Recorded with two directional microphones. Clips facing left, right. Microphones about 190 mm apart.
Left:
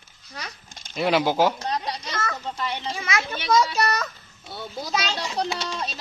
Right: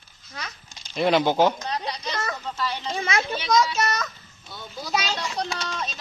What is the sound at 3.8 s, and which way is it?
Speech, 10° left (ahead or behind).